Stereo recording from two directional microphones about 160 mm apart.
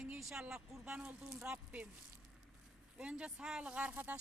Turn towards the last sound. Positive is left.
turn(degrees=-10)  # may be behind; listen again after turning